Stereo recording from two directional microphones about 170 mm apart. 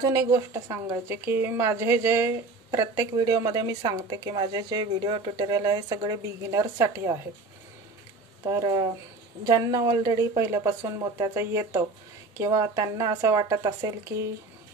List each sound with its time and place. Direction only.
0.0 s speech: 20° right (ahead or behind)
8.5 s speech: 25° right (ahead or behind)